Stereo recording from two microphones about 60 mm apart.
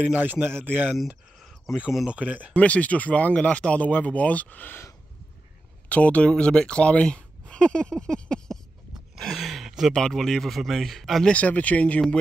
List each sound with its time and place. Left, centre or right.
0.0 s speech: right
2.0 s speech: right
2.5 s speech: left
5.9 s speech: left
9.3 s a sound: centre
9.9 s speech: centre
11.2 s speech: left